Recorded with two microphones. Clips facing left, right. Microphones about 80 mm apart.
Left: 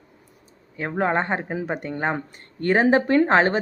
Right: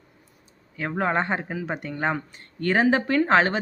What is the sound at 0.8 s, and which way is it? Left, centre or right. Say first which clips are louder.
Speech: left 2 dB; centre.